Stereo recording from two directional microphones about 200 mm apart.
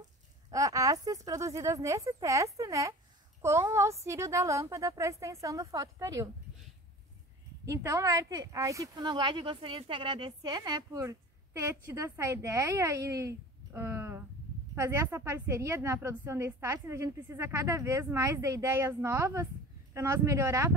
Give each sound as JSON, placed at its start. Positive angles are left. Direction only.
{"t": 0.5, "sound": "a woman's voice", "side_deg": -15}
{"t": 7.6, "sound": "a woman's voice", "side_deg": -15}